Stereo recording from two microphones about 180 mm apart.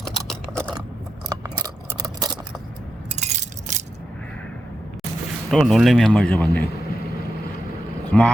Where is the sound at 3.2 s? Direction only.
40° right (ahead or behind).